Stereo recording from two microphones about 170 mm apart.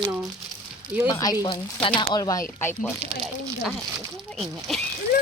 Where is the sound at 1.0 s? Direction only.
20° left (ahead or behind).